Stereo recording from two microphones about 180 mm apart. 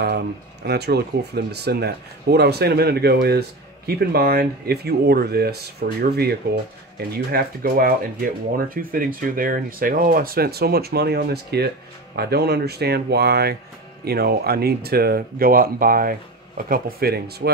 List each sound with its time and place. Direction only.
0.0 s speech: 65° right (ahead or behind)